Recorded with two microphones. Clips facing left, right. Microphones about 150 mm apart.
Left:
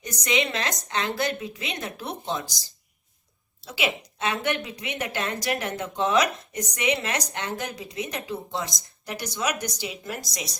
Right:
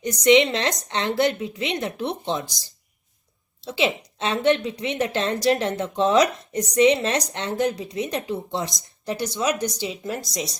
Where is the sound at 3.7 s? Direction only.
25° right (ahead or behind).